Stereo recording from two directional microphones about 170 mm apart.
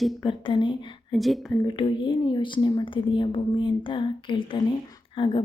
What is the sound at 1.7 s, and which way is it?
A woman's voice, 30° left (ahead or behind).